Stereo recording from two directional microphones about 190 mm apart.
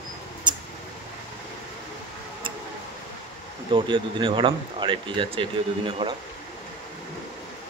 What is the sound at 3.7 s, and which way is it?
Speech, 25° right (ahead or behind).